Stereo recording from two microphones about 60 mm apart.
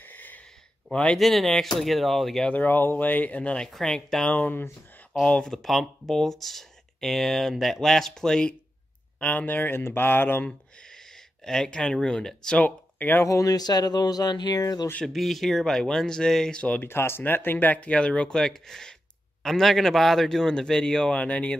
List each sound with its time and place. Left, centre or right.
0.0 s a sound: left
0.9 s speech: centre
1.2 s speech: centre
2.5 s speech: left
3.6 s speech: centre
4.3 s speech: left
5.4 s speech: centre
9.2 s speech: left
11.4 s speech: centre
12.5 s speech: left
13.2 s speech: left
15.1 s speech: centre
16.8 s speech: left